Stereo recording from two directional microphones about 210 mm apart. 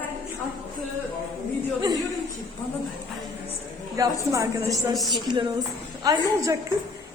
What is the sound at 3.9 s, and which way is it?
A woman's voice, 15° right (ahead or behind).